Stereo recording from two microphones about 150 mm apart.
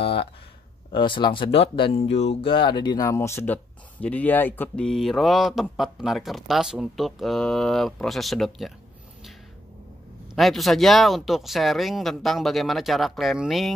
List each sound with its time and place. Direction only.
0.0 s a sound: 40° left (ahead or behind)
0.9 s speech: 35° left (ahead or behind); by 8.7 s centre (ahead or behind)
10.3 s speech: centre (ahead or behind)